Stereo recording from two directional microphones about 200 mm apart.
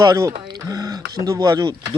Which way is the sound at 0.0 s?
15° right (ahead or behind).